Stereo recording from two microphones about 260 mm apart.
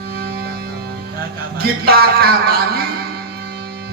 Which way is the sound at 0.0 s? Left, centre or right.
Right.